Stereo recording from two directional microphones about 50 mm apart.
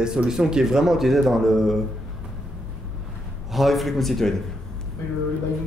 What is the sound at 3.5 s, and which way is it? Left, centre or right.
Speech, centre.